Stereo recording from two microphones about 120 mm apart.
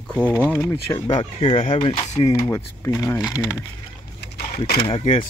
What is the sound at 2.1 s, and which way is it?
Speech, 30° left (ahead or behind).